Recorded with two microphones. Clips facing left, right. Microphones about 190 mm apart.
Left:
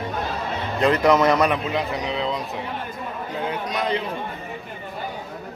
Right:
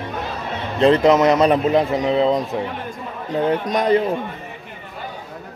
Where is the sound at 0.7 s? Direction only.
25° right (ahead or behind).